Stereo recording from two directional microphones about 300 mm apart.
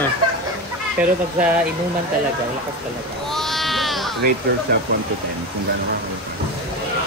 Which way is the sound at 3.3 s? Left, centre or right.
Centre.